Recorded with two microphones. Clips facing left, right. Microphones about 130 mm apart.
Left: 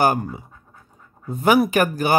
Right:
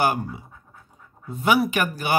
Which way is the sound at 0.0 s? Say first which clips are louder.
Left 3 dB; 45° left (ahead or behind).